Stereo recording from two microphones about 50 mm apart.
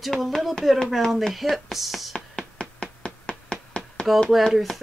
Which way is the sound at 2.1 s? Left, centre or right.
Centre.